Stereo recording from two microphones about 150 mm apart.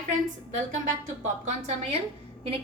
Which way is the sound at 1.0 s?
50° right (ahead or behind).